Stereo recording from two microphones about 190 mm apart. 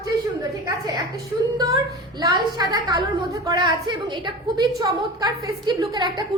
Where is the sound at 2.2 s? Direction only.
20° right (ahead or behind).